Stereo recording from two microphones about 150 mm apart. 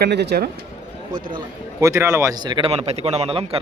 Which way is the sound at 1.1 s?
65° right (ahead or behind).